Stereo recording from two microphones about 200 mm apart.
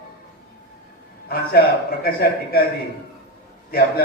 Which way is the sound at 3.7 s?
50° left (ahead or behind).